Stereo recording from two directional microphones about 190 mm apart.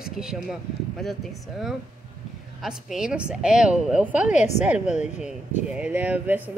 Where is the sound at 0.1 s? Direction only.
Centre (ahead or behind).